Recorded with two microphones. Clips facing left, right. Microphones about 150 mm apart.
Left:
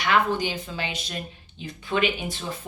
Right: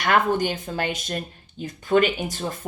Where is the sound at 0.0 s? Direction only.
50° right (ahead or behind).